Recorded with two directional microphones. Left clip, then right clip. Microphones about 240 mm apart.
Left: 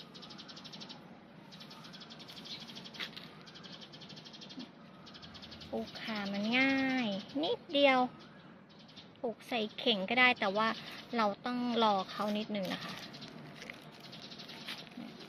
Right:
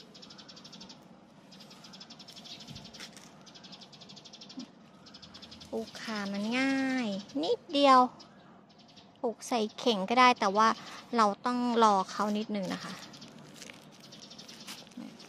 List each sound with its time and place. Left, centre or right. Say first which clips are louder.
5.7 s a woman's voice: right 2 dB; right
9.2 s a woman's voice: right 5 dB; right